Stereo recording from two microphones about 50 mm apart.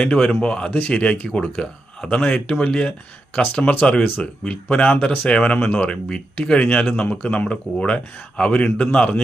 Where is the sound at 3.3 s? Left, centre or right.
Left.